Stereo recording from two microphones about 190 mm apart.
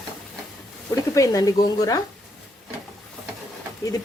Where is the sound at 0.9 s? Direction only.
15° left (ahead or behind).